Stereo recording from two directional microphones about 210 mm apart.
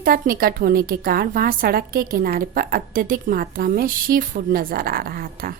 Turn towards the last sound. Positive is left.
turn(degrees=-45)  # may be behind; listen again after turning